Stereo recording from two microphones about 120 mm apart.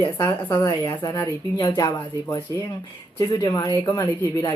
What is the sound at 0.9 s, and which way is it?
Speech, 35° left (ahead or behind).